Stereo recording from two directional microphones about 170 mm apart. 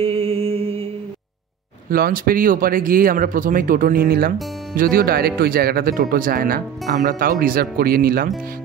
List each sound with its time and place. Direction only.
0.0 s music: 35° right (ahead or behind)
1.9 s speech: 60° right (ahead or behind)